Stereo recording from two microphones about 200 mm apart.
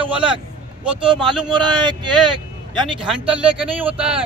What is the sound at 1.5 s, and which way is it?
Speech, 20° right (ahead or behind).